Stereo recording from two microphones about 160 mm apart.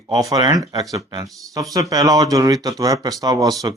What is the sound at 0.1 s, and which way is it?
Speech, 25° right (ahead or behind).